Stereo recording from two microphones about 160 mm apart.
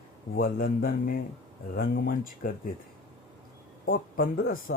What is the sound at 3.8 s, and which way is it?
Speech, 65° left (ahead or behind).